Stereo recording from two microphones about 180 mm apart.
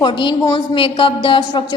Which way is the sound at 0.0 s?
30° left (ahead or behind).